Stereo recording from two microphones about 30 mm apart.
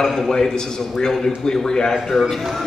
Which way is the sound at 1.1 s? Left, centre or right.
Centre.